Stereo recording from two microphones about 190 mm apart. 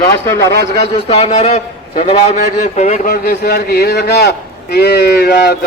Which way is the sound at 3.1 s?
55° left (ahead or behind).